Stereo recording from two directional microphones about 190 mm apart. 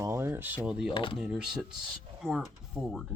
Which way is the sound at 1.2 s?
5° right (ahead or behind).